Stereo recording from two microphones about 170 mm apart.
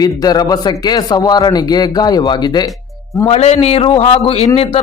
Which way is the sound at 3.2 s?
35° left (ahead or behind).